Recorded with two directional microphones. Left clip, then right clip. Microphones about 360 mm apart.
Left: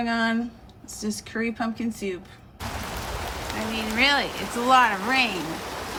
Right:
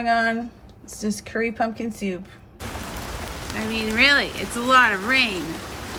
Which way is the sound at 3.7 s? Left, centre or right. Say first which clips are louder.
Right 4 dB; centre.